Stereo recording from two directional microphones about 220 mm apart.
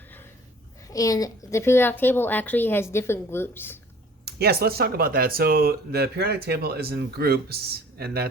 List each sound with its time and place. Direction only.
0.9 s a woman's voice: 15° left (ahead or behind)
4.3 s speech: 45° right (ahead or behind)